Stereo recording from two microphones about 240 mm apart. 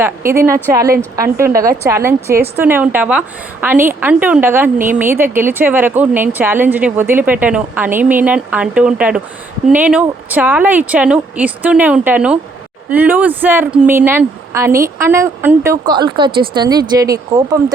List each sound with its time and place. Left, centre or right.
0.0 s a woman's voice: centre